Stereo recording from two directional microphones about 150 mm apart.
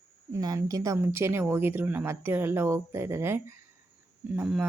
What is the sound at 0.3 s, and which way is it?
Speech, 20° right (ahead or behind).